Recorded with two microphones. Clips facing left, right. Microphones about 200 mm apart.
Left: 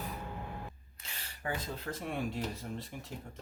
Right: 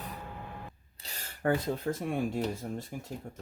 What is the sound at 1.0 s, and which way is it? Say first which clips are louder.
Speech: right 10 dB; 45° right (ahead or behind).